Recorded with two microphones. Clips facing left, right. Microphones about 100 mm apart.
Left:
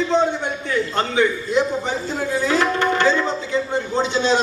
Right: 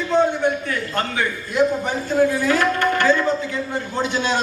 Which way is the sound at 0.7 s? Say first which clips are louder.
Left 3 dB; 20° left (ahead or behind).